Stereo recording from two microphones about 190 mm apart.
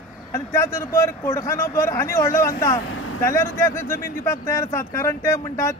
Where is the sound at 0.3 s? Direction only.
15° left (ahead or behind).